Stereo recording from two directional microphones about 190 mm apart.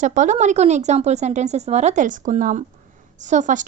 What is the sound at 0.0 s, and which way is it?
Speech, 40° right (ahead or behind).